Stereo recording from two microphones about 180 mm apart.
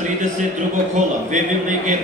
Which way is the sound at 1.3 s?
45° right (ahead or behind).